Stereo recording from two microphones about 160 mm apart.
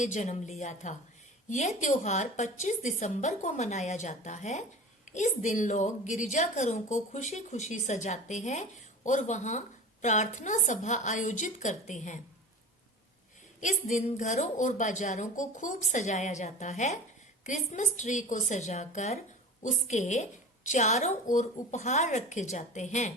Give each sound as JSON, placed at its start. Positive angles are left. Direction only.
{"t": 0.0, "sound": "a woman's voice", "side_deg": 50}
{"t": 13.6, "sound": "a woman's voice", "side_deg": 50}